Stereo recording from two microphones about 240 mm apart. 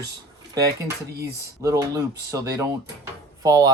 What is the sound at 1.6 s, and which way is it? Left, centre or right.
Speech, centre.